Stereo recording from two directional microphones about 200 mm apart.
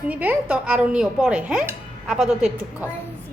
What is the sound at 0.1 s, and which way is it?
Dishes, 10° right (ahead or behind).